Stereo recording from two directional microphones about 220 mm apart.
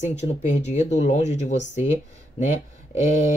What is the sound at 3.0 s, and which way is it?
Speech, 30° left (ahead or behind).